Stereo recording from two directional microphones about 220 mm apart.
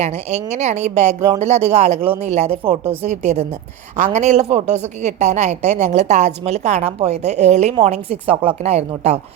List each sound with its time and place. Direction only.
0.0 s speech: 30° right (ahead or behind)